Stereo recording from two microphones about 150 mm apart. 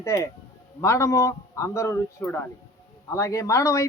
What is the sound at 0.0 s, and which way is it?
Speech, 20° left (ahead or behind).